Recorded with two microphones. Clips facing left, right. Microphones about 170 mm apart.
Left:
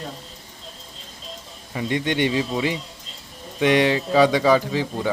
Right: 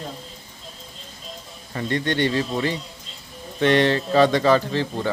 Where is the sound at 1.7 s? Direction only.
10° left (ahead or behind).